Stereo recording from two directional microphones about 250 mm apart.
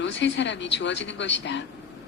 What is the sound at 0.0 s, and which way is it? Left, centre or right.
A man's voice, left.